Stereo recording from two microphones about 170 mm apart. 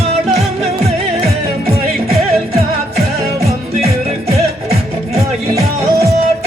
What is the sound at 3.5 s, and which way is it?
Music, 40° right (ahead or behind).